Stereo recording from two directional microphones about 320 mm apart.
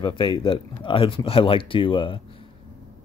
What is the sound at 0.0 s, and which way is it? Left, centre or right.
Speech, centre.